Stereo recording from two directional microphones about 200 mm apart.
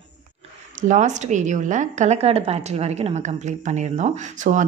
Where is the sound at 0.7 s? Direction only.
35° right (ahead or behind).